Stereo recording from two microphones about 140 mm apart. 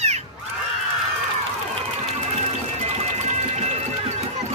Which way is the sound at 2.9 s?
50° right (ahead or behind).